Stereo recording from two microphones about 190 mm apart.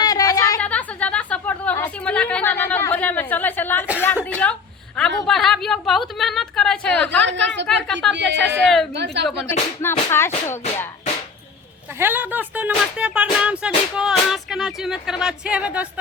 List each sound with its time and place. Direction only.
0.0 s a sound: 20° left (ahead or behind)
0.6 s a sound: 5° left (ahead or behind)
4.9 s speech: 5° left (ahead or behind)
7.3 s a woman's voice: 70° right (ahead or behind)
8.5 s speech: centre (ahead or behind)
9.2 s speech: 65° right (ahead or behind)
9.5 s music: 10° left (ahead or behind)
11.9 s speech: 10° right (ahead or behind)